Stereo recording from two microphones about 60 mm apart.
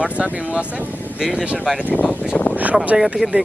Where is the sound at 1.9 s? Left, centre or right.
Left.